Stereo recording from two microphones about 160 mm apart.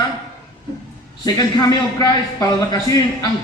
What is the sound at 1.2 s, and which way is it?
A man's voice, 25° left (ahead or behind).